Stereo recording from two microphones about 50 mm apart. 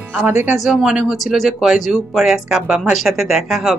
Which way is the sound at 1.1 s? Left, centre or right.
Centre.